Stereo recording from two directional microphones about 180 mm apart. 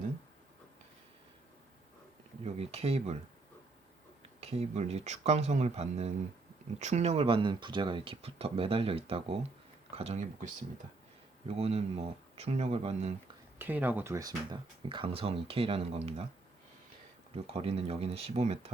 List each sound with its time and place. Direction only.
2.4 s speech: 35° right (ahead or behind)
4.4 s speech: 35° right (ahead or behind)
13.6 s speech: 10° right (ahead or behind); by 16.2 s 35° right (ahead or behind)
17.3 s speech: 35° right (ahead or behind)